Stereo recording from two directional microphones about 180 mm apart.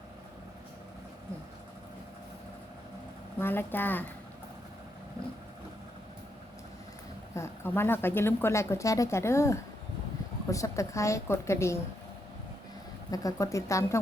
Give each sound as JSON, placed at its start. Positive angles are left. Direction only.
{"t": 3.3, "sound": "speech", "side_deg": 10}
{"t": 7.3, "sound": "speech", "side_deg": 15}
{"t": 13.1, "sound": "speech", "side_deg": 20}